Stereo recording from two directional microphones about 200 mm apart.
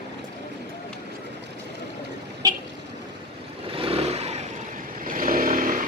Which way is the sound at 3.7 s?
30° right (ahead or behind).